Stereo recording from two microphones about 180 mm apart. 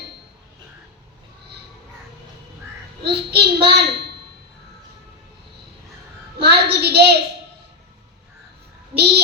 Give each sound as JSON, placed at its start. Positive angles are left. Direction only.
{"t": 3.0, "sound": "a child's voice", "side_deg": -65}
{"t": 6.4, "sound": "a sound", "side_deg": -65}
{"t": 9.0, "sound": "child singing", "side_deg": -65}